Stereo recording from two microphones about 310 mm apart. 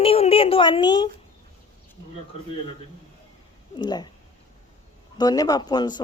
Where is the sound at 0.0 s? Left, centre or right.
Centre.